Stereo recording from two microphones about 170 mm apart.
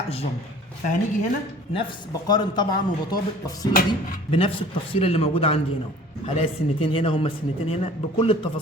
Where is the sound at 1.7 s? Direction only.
25° left (ahead or behind).